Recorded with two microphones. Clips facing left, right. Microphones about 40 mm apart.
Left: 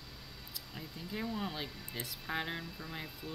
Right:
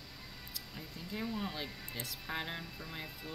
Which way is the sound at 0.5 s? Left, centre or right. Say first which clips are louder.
Left 2 dB; centre.